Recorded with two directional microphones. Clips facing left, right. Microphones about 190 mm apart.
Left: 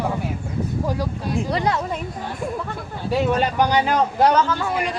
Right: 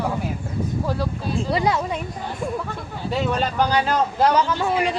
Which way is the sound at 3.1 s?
15° left (ahead or behind).